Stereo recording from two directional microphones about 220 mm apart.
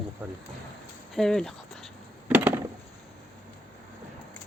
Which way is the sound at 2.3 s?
10° right (ahead or behind).